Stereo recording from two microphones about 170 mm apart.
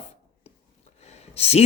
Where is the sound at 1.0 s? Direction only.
40° left (ahead or behind).